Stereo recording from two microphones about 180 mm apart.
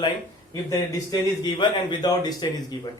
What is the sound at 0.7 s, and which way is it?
A man's voice, 20° left (ahead or behind).